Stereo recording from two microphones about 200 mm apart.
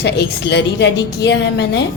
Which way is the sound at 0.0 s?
60° left (ahead or behind).